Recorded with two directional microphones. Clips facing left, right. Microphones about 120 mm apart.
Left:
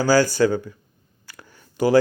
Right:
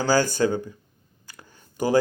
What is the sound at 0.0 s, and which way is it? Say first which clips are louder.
Speech: left 4 dB; 20° right (ahead or behind).